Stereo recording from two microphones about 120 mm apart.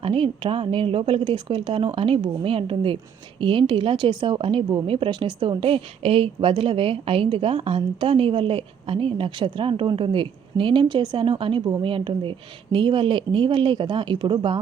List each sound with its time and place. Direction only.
0.0 s a woman's voice: 50° right (ahead or behind)